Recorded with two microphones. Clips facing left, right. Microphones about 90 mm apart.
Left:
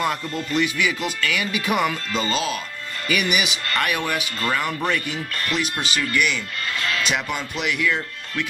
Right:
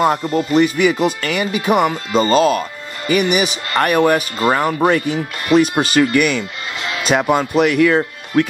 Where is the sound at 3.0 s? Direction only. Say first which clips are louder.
Right 7 dB; 30° right (ahead or behind); by 8.4 s 45° right (ahead or behind).